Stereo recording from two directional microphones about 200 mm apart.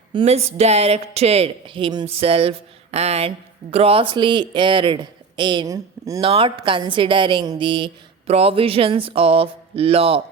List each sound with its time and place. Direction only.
0.1 s speech: 25° right (ahead or behind)
6.1 s speech: 25° right (ahead or behind)